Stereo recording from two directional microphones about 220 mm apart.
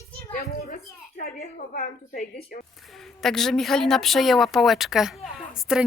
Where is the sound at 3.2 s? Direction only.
Centre (ahead or behind).